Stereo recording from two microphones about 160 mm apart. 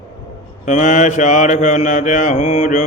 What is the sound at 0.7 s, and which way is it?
Mantra, 50° left (ahead or behind).